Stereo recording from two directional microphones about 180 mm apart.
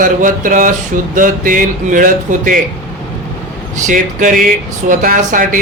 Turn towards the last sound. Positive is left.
turn(degrees=-50)  # may be behind; listen again after turning